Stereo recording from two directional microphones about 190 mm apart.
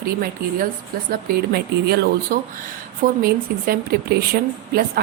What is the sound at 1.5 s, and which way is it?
A woman's voice, 60° right (ahead or behind).